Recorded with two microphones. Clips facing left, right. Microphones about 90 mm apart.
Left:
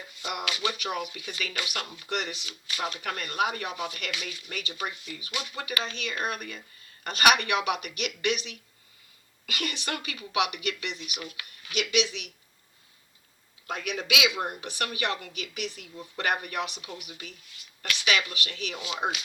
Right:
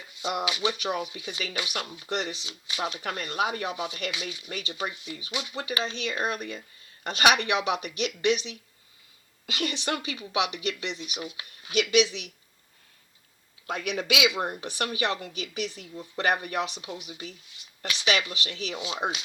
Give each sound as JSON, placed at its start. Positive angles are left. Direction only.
{"t": 0.2, "sound": "a woman's voice", "side_deg": -20}
{"t": 4.4, "sound": "a woman's voice", "side_deg": -35}
{"t": 14.1, "sound": "a woman's voice", "side_deg": -35}